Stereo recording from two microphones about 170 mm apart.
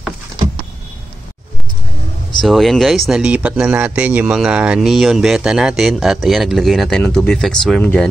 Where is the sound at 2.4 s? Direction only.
Centre (ahead or behind).